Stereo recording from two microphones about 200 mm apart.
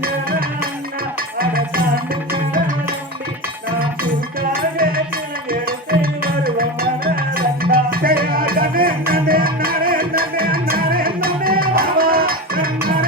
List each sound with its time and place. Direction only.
0.0 s music: 45° right (ahead or behind)
1.4 s cowbell: 45° right (ahead or behind)
2.3 s music: 45° right (ahead or behind)
3.8 s music: 45° right (ahead or behind)